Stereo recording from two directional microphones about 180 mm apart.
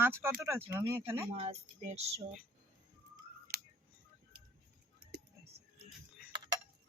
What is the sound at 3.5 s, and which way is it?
Scissors, 60° right (ahead or behind).